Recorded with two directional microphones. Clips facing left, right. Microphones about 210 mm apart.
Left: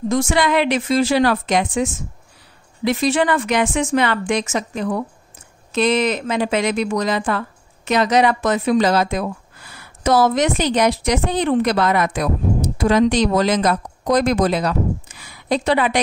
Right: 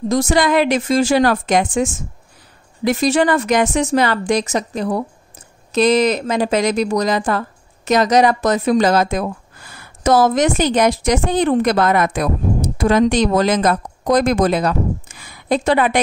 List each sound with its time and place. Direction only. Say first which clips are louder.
0.1 s a woman's voice: right 3 dB; 40° right (ahead or behind)